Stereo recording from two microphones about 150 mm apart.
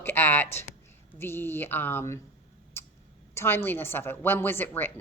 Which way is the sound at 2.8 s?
15° left (ahead or behind).